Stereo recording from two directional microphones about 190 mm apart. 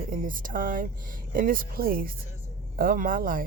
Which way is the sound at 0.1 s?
45° right (ahead or behind).